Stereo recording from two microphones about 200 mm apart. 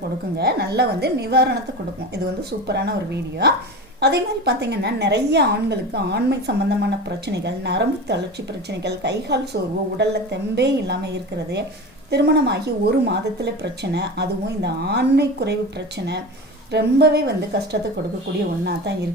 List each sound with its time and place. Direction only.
0.3 s a woman's voice: 55° right (ahead or behind)
16.7 s speech: 55° right (ahead or behind)